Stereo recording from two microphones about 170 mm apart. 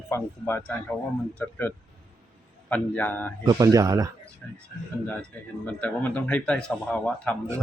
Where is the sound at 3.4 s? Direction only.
20° right (ahead or behind).